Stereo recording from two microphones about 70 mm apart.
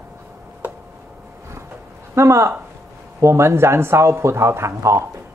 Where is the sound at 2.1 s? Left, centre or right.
Right.